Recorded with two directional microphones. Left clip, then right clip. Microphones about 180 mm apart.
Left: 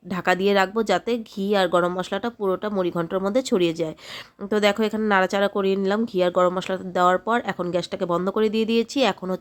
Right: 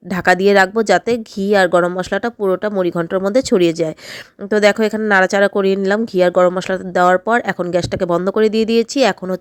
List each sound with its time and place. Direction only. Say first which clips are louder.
0.1 s a woman's voice: right 8 dB; 30° right (ahead or behind)